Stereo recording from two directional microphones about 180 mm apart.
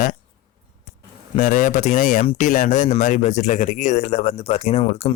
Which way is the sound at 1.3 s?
45° left (ahead or behind).